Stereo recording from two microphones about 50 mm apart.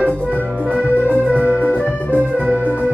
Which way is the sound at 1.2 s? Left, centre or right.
Right.